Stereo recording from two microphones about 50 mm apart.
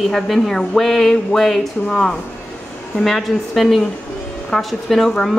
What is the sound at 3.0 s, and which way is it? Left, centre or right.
A woman's voice, centre.